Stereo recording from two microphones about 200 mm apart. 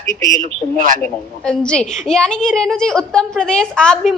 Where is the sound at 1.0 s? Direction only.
5° left (ahead or behind).